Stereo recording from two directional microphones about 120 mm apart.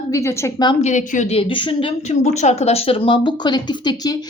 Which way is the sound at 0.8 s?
90° left.